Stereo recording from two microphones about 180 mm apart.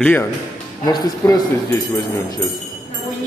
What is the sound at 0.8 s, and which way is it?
Speech, 20° left (ahead or behind).